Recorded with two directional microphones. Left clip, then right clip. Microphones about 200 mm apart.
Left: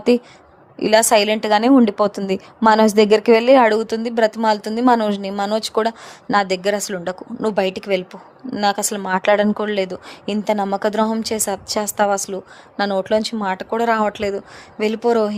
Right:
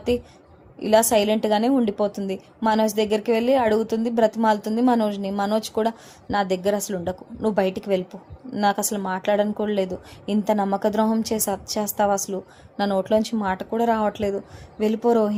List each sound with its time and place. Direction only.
0.8 s speech: 40° left (ahead or behind)